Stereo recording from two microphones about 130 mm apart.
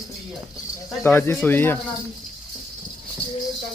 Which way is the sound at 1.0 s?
15° left (ahead or behind).